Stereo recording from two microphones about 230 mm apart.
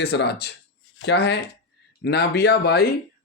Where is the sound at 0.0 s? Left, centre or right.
Left.